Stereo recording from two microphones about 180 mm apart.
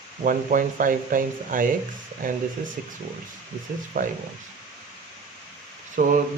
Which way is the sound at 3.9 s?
50° right (ahead or behind).